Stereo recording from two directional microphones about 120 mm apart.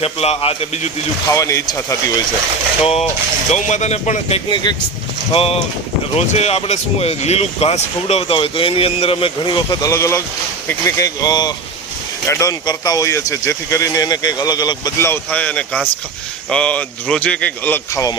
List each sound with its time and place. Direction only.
0.0 s speech: 55° left (ahead or behind)
1.3 s speech: 25° left (ahead or behind)
2.8 s speech: 60° left (ahead or behind)
3.5 s speech: 75° left (ahead or behind)
4.4 s speech: 40° left (ahead or behind)
6.1 s speech: 65° left (ahead or behind); by 9.7 s 40° left (ahead or behind)
9.8 s speech: 25° left (ahead or behind)
14.9 s speech: 20° left (ahead or behind)